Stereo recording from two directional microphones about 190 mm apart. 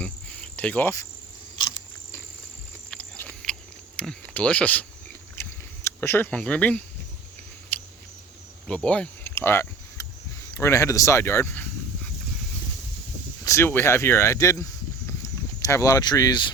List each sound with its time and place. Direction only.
0.0 s cricket: 5° left (ahead or behind)
2.9 s a sound: 5° left (ahead or behind)
5.8 s speech: 10° left (ahead or behind)
7.7 s a sound: 10° left (ahead or behind)
8.6 s cricket: 5° left (ahead or behind)
10.5 s speech: 15° left (ahead or behind)
13.4 s speech: 15° left (ahead or behind)